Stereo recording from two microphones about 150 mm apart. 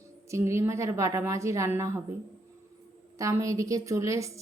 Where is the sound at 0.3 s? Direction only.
20° right (ahead or behind).